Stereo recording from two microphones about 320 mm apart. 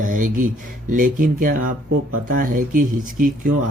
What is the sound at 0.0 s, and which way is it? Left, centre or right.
Speech, right.